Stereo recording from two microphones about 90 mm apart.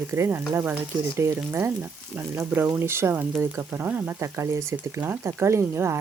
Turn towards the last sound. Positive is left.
turn(degrees=-30)  # may be behind; listen again after turning